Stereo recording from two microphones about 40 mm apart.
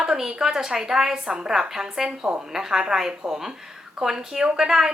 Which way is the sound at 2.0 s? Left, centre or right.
Right.